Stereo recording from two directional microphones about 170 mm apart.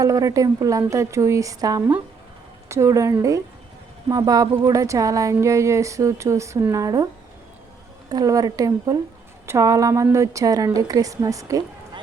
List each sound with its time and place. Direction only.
0.0 s speech: 20° right (ahead or behind)
8.1 s speech: 20° right (ahead or behind)